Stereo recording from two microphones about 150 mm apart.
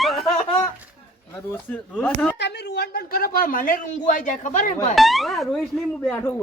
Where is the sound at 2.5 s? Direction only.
90° left; by 4.8 s 55° left (ahead or behind).